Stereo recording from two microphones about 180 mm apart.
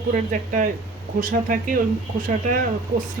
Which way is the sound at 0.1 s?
45° right (ahead or behind).